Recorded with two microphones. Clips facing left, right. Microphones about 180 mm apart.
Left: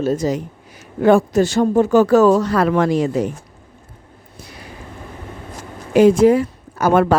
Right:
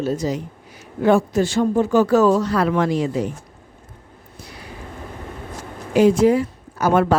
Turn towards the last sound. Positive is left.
turn(degrees=55)  # may be behind; listen again after turning